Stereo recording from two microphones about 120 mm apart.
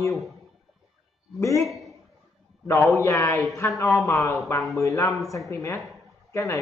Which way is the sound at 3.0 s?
25° left (ahead or behind).